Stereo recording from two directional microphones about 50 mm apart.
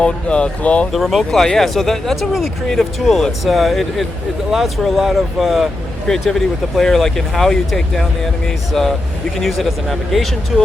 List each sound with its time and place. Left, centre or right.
0.0 s speech: left
0.9 s speech: centre
6.1 s speech: centre